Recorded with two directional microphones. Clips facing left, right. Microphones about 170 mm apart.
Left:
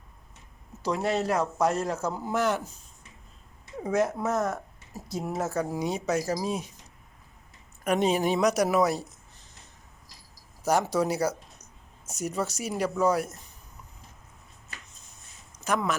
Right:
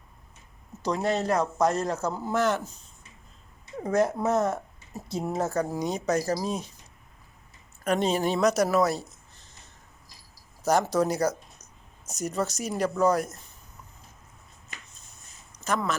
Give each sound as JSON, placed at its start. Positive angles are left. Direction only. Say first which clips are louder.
{"t": 0.8, "sound": "a man's voice", "louder": "right 1 dB", "side_deg": 5}
{"t": 3.8, "sound": "speech", "louder": "right 2 dB", "side_deg": 5}
{"t": 4.3, "sound": "speech", "louder": "right 3 dB", "side_deg": -25}
{"t": 5.2, "sound": "a man's voice", "louder": "right 2 dB", "side_deg": 5}
{"t": 7.9, "sound": "a man's voice", "louder": "left 1 dB", "side_deg": 15}
{"t": 10.6, "sound": "a man's voice", "louder": "right 1 dB", "side_deg": 10}
{"t": 15.5, "sound": "speech", "louder": "left 1 dB", "side_deg": 10}